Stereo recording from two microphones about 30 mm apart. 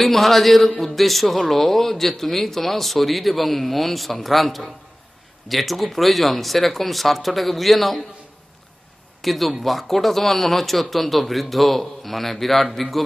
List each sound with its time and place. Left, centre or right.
0.0 s speech: centre
9.2 s speech: centre